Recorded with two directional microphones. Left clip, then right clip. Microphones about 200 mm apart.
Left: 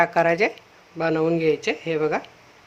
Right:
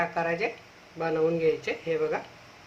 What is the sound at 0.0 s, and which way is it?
Speech, 55° left (ahead or behind).